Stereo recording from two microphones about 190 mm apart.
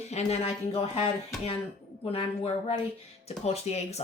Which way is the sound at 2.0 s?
30° left (ahead or behind).